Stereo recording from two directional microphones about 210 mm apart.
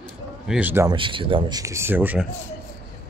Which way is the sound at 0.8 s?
25° right (ahead or behind).